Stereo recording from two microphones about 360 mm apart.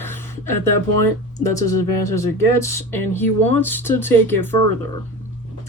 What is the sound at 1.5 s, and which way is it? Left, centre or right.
Speech, centre.